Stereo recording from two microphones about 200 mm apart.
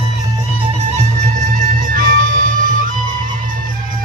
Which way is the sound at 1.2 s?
40° right (ahead or behind).